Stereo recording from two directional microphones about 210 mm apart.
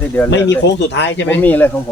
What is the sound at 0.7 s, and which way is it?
Speech, 55° left (ahead or behind).